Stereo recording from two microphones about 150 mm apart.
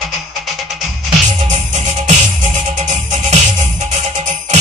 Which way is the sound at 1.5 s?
45° right (ahead or behind).